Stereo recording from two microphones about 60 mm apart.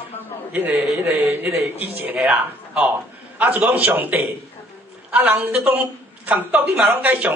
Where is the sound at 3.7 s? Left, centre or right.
Right.